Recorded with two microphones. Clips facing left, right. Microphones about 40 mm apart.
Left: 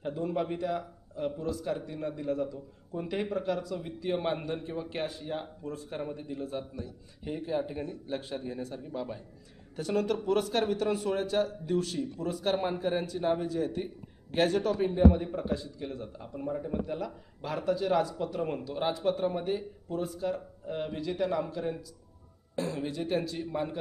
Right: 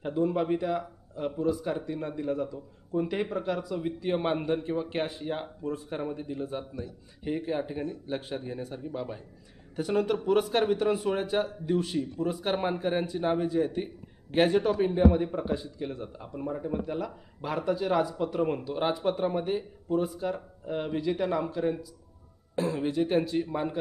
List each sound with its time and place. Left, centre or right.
0.0 s a man's voice: centre